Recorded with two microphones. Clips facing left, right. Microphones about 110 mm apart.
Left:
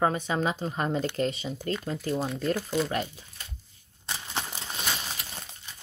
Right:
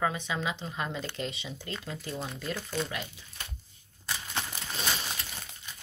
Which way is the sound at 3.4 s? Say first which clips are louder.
Right 3 dB; 70° right (ahead or behind).